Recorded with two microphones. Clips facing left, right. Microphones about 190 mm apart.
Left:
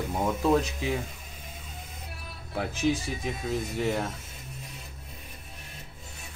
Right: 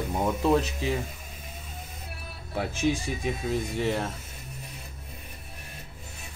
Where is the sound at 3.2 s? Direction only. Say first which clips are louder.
Right 2 dB; centre (ahead or behind).